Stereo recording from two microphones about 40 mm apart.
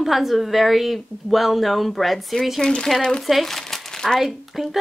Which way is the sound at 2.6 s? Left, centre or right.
Left.